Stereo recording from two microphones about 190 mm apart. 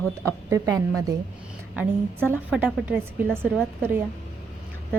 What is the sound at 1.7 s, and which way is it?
A woman's voice, 10° right (ahead or behind).